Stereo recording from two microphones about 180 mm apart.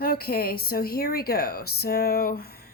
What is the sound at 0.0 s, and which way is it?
Speech, 55° left (ahead or behind).